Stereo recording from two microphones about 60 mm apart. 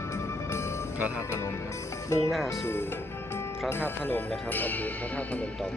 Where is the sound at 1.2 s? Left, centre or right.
Left.